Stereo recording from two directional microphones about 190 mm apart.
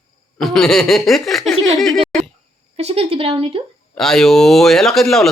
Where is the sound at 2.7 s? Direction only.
30° right (ahead or behind).